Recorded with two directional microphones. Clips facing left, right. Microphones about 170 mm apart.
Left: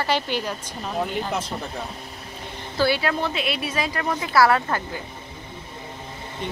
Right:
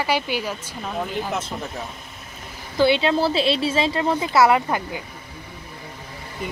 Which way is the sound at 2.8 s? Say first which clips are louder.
Right 4 dB; 20° right (ahead or behind).